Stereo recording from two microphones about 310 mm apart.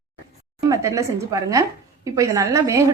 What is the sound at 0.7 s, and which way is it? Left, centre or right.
A woman's voice, centre.